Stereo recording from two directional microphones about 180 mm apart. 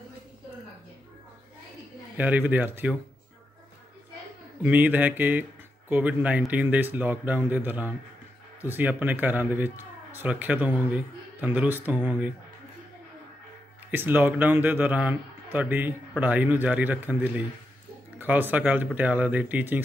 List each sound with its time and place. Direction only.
2.1 s speech: 10° right (ahead or behind)
4.6 s speech: 10° right (ahead or behind)
13.8 s speech: 10° right (ahead or behind)